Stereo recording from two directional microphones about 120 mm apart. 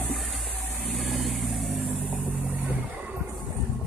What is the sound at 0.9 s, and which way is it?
Vehicle, centre (ahead or behind).